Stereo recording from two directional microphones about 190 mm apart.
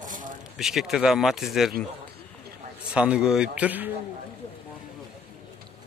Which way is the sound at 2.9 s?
5° right (ahead or behind).